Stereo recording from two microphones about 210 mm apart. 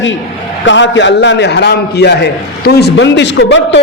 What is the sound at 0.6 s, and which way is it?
A man's voice, 60° left (ahead or behind).